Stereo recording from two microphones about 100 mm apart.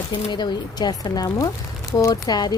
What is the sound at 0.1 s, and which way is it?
Speech, 50° left (ahead or behind).